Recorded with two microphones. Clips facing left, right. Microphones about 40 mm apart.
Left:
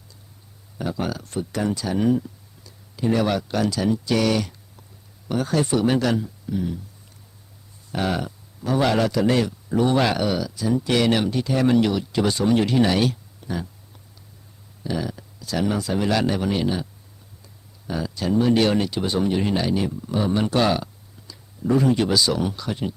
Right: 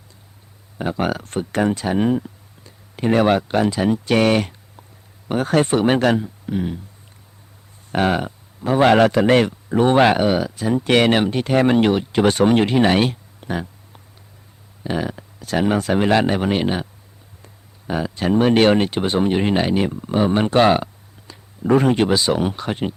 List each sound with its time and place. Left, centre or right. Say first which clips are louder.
0.8 s speech: right 5 dB; right
2.9 s speech: right 5 dB; right
7.9 s a man's voice: right 6 dB; right
12.7 s a sound: right 3 dB; right
14.8 s speech: right 4 dB; right